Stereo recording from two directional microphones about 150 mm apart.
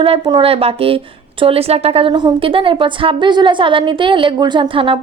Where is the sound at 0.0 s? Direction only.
35° right (ahead or behind).